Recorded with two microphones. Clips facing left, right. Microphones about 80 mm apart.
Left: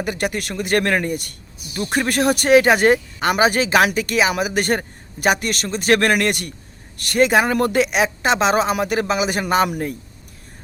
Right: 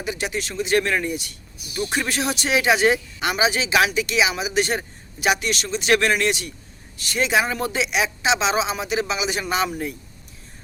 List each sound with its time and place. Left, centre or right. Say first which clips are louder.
0.0 s speech: left 4 dB; left